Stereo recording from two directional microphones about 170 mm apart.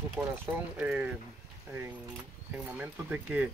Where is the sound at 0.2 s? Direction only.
10° right (ahead or behind).